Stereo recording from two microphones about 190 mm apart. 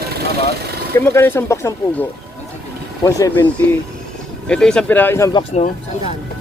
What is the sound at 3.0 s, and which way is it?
Speech, 15° left (ahead or behind).